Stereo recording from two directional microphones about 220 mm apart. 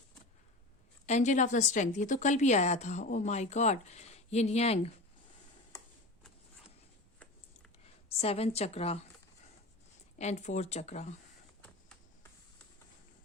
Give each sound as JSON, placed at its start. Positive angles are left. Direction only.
{"t": 1.0, "sound": "a woman's voice", "side_deg": 30}
{"t": 8.2, "sound": "a woman's voice", "side_deg": 25}
{"t": 10.2, "sound": "a woman's voice", "side_deg": 30}